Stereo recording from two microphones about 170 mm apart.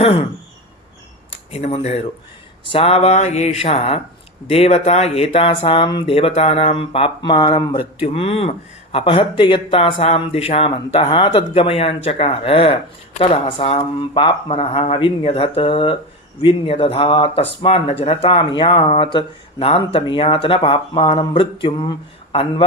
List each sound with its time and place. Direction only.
1.3 s speech: 35° left (ahead or behind)